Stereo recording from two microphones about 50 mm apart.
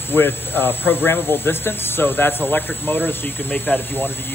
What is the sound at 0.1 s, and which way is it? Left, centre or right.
Speech, left.